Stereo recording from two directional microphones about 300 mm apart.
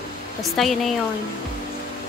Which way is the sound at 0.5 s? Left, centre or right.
Centre.